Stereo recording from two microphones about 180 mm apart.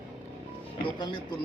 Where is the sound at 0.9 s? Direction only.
25° left (ahead or behind).